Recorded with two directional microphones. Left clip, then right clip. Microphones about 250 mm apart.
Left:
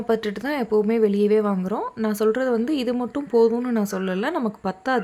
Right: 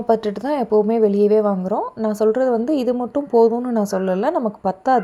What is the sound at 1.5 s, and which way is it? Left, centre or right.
A woman's voice, centre.